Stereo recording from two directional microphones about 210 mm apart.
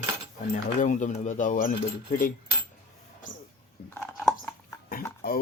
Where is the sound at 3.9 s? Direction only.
5° left (ahead or behind).